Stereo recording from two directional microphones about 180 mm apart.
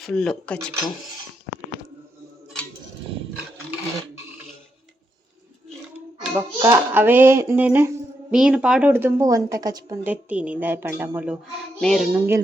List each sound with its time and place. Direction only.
0.0 s speech: 5° left (ahead or behind)
6.3 s a woman's voice: 15° right (ahead or behind)
11.8 s speech: centre (ahead or behind)
12.1 s a woman's voice: 10° right (ahead or behind)